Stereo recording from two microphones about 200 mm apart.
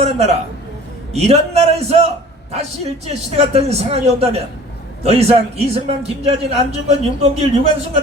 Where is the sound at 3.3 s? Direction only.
30° right (ahead or behind).